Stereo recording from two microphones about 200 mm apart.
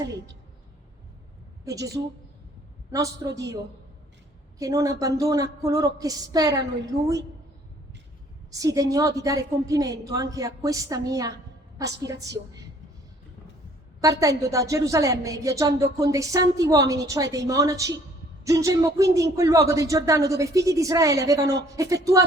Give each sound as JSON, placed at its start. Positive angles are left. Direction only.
{"t": 1.6, "sound": "a woman's voice", "side_deg": -15}
{"t": 2.9, "sound": "a woman's voice", "side_deg": -15}
{"t": 8.4, "sound": "a woman's voice", "side_deg": -15}
{"t": 14.0, "sound": "a woman's voice", "side_deg": -15}